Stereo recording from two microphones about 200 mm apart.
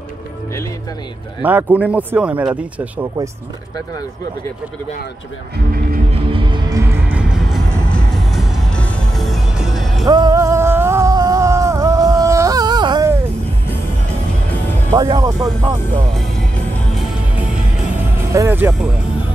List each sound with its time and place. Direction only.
1.4 s speech: 10° right (ahead or behind)
6.3 s music: 25° right (ahead or behind)
6.8 s music: 10° right (ahead or behind)
10.0 s music: 20° right (ahead or behind)
14.9 s speech: 20° right (ahead or behind)
16.1 s music: centre (ahead or behind)
18.1 s speech: 15° right (ahead or behind)